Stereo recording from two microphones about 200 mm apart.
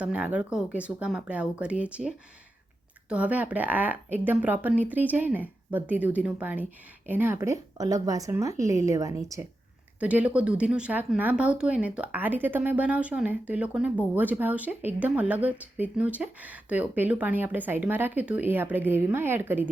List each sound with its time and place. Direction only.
0.0 s speech: 5° right (ahead or behind)